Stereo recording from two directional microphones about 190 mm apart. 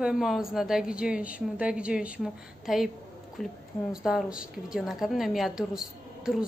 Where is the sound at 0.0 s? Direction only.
5° right (ahead or behind).